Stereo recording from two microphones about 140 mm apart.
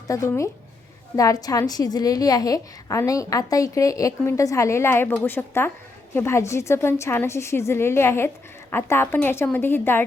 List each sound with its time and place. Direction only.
0.1 s a woman's voice: 20° left (ahead or behind)